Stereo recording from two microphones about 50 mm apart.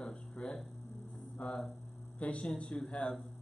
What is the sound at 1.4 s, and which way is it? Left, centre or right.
A man's voice, left.